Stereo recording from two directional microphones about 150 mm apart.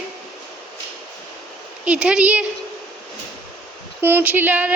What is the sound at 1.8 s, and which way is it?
Speech, 5° right (ahead or behind).